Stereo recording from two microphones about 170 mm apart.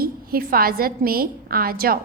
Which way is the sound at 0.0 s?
60° right (ahead or behind).